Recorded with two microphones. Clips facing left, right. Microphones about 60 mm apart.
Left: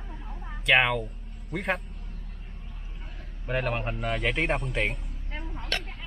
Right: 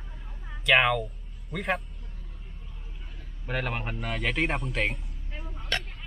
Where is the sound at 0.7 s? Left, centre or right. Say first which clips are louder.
Even; centre.